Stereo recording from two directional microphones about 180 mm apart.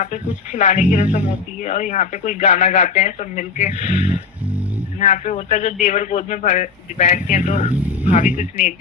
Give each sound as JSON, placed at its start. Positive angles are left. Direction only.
{"t": 0.0, "sound": "speech", "side_deg": 45}